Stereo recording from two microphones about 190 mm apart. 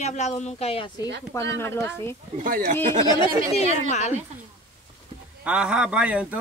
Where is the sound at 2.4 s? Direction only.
45° right (ahead or behind).